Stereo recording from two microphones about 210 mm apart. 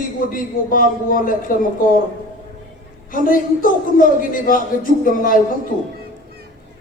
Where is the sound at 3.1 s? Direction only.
40° left (ahead or behind).